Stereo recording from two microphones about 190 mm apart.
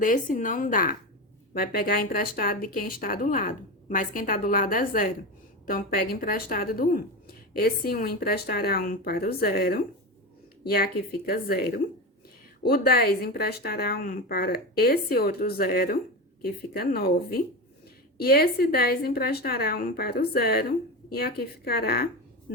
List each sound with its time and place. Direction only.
0.0 s speech: 45° left (ahead or behind)